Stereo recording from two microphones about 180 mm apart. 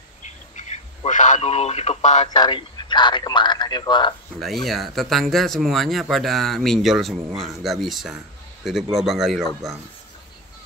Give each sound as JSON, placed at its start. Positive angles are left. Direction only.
{"t": 0.6, "sound": "radio", "side_deg": 40}
{"t": 2.2, "sound": "speech", "side_deg": 25}
{"t": 4.6, "sound": "speech", "side_deg": 0}